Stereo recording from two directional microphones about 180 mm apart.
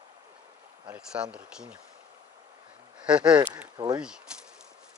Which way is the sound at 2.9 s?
5° right (ahead or behind).